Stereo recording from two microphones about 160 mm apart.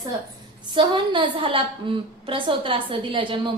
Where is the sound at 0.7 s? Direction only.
30° right (ahead or behind).